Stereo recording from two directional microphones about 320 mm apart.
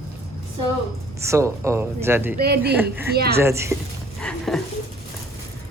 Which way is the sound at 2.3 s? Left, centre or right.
Right.